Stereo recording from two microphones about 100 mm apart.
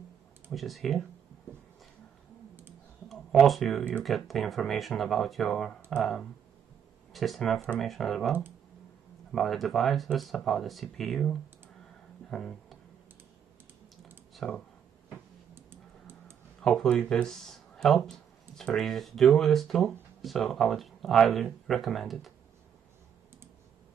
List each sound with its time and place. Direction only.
0.5 s speech: centre (ahead or behind)
3.1 s speech: centre (ahead or behind)
9.3 s speech: centre (ahead or behind)
12.3 s a sound: 5° left (ahead or behind)
14.3 s clicking: 5° left (ahead or behind)
15.5 s tick-tock: 25° right (ahead or behind)
16.6 s speech: 5° left (ahead or behind)